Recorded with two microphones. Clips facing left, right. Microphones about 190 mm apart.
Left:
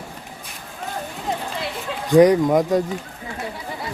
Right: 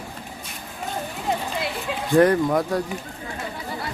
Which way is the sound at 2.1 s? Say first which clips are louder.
Left 4 dB; 15° left (ahead or behind).